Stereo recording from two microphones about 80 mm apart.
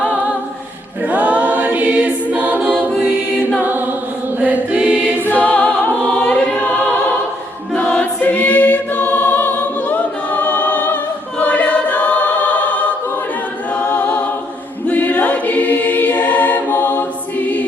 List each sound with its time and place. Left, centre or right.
1.0 s choir: centre
3.6 s chant: right
5.2 s music: left
6.1 s choir: centre
7.8 s choir: centre
13.7 s a capella: left
14.8 s choir: centre